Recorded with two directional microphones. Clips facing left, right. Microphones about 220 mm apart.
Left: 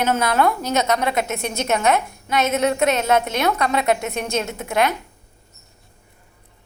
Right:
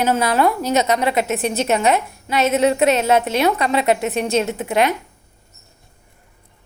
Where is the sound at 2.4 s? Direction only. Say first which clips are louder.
Right 4 dB; 5° right (ahead or behind).